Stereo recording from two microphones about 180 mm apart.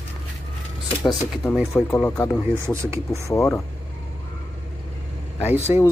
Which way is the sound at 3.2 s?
15° left (ahead or behind).